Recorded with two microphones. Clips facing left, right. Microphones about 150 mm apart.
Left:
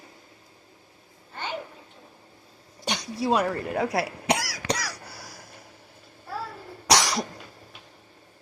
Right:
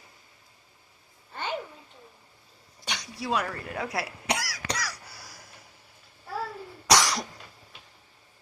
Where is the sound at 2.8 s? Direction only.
30° left (ahead or behind).